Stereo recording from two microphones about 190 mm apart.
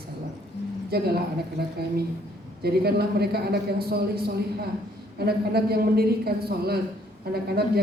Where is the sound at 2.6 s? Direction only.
55° right (ahead or behind).